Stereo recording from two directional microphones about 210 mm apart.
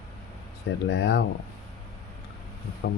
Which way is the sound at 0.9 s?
55° left (ahead or behind).